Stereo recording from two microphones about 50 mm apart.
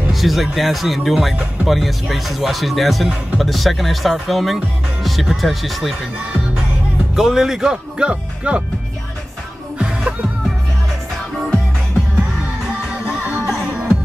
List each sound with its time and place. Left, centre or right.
0.1 s speech: centre
7.2 s speech: centre
9.8 s music: centre
13.3 s music: centre
13.7 s music: right